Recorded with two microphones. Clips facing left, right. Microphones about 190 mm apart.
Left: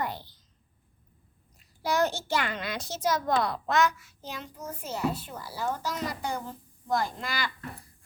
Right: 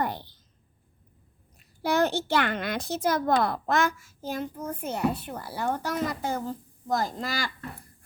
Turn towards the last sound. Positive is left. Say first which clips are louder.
# right 2 dB
turn(degrees=-45)  # may be behind; listen again after turning